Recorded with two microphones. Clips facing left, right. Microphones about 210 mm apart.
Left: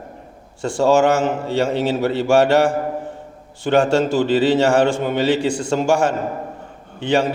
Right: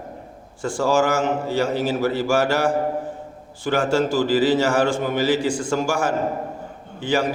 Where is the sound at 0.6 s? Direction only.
25° left (ahead or behind).